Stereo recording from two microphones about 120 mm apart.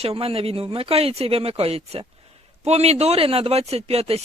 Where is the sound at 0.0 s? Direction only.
55° right (ahead or behind).